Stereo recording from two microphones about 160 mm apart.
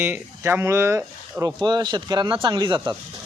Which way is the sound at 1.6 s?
30° right (ahead or behind).